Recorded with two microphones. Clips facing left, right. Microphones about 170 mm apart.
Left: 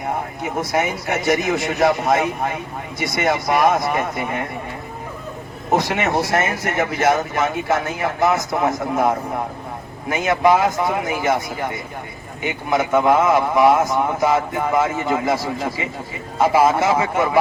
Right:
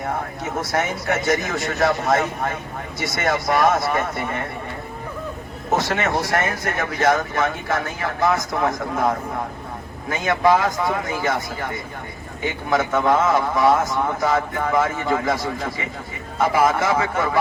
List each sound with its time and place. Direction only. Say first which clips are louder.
0.0 s speech: left 2 dB; 20° left (ahead or behind)
5.9 s speech: left 2 dB; 20° left (ahead or behind)
12.5 s speech: left 2 dB; 15° left (ahead or behind)
16.4 s speech: left 3 dB; 25° left (ahead or behind)